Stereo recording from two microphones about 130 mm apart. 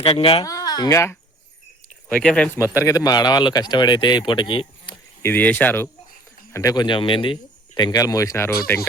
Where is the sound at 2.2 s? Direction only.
5° left (ahead or behind).